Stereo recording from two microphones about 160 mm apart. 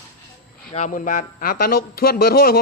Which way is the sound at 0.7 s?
50° left (ahead or behind).